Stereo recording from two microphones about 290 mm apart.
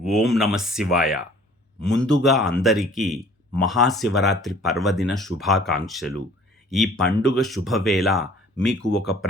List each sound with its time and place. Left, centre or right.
0.0 s speech: centre